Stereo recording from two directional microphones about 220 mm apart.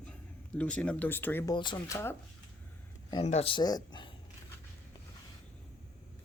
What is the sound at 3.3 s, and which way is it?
Speech, 25° left (ahead or behind).